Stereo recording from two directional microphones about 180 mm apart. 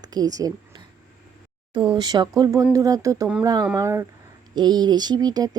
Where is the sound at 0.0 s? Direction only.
20° right (ahead or behind).